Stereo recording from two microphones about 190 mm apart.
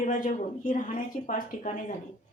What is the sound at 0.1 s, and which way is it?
A woman's voice, 40° left (ahead or behind).